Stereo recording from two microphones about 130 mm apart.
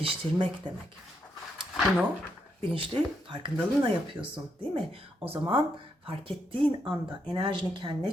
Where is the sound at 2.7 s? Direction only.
40° right (ahead or behind).